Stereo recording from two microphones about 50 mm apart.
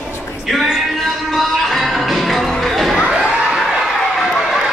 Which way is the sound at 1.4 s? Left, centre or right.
Centre.